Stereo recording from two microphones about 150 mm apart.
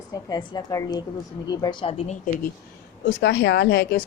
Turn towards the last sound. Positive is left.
turn(degrees=90)